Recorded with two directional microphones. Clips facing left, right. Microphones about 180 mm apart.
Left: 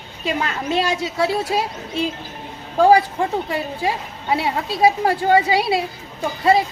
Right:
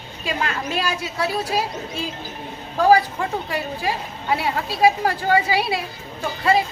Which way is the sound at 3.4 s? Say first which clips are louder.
Left 2 dB; 25° left (ahead or behind).